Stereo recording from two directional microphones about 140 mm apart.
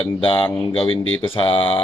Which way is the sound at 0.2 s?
40° left (ahead or behind).